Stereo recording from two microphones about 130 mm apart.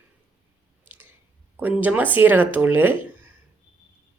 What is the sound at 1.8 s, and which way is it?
Speech, 15° right (ahead or behind).